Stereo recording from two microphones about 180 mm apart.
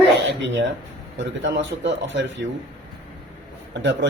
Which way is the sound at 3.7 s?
85° right.